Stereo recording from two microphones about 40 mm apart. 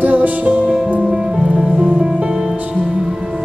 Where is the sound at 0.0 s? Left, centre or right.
Right.